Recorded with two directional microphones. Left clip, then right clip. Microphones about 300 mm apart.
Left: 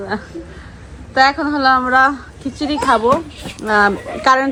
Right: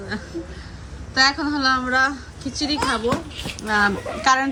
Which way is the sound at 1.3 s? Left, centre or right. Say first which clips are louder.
Left 7 dB; centre.